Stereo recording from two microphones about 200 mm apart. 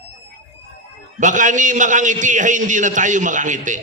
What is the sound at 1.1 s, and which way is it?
A man's voice, 40° right (ahead or behind).